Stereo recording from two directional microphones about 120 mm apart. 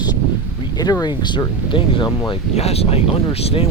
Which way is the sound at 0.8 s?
35° left (ahead or behind).